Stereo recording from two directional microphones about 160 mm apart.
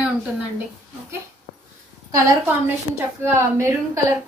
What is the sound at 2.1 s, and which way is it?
A woman's voice, 20° right (ahead or behind).